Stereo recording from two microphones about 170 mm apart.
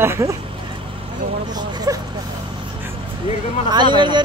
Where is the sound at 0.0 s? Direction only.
15° right (ahead or behind).